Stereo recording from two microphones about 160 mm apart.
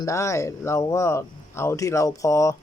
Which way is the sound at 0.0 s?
20° left (ahead or behind).